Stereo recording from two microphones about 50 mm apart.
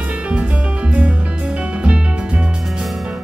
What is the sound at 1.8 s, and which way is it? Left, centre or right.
Music, right.